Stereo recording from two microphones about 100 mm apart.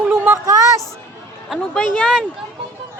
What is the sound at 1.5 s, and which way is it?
Speech, 5° left (ahead or behind).